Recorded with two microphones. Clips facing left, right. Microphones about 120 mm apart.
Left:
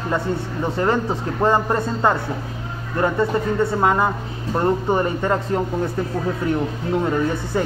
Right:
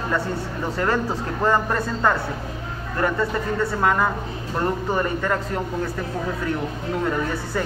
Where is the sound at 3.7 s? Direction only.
20° left (ahead or behind).